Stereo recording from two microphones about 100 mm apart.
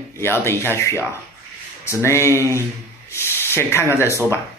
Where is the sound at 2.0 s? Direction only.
30° left (ahead or behind).